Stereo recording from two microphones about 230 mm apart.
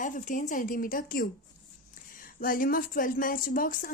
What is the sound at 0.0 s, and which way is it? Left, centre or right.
A woman's voice, left.